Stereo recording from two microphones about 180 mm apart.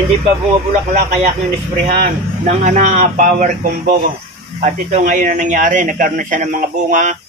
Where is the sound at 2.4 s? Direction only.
40° right (ahead or behind).